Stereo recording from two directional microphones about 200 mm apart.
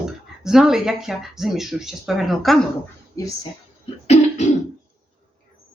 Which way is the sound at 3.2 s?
15° left (ahead or behind).